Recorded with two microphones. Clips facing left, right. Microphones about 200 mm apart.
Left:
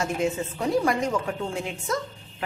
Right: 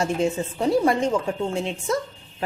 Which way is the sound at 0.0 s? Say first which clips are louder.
Right 3 dB; 30° right (ahead or behind).